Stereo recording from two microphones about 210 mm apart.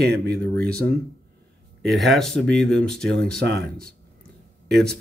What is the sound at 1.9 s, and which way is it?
Speech, centre (ahead or behind).